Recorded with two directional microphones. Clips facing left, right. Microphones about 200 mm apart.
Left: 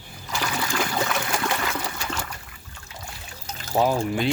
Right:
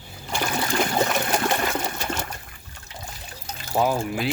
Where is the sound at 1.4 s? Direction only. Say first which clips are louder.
Right 3 dB; 25° right (ahead or behind).